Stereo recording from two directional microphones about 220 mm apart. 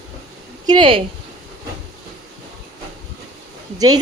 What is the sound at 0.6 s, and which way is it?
Speech, 20° right (ahead or behind).